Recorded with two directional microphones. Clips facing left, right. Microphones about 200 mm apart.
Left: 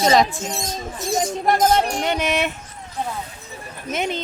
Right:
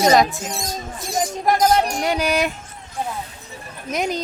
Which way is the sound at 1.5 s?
25° left (ahead or behind).